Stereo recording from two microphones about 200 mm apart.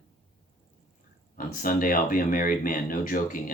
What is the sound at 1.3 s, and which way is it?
Speech, 45° left (ahead or behind).